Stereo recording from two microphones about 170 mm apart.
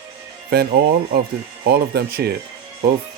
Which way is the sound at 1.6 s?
70° right (ahead or behind).